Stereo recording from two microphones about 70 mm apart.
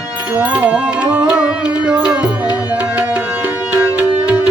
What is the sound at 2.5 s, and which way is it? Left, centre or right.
Music, left.